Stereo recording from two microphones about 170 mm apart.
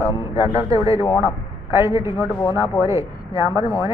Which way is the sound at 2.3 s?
20° left (ahead or behind).